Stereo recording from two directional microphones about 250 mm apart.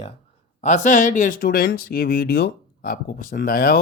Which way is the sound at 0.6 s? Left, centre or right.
Left.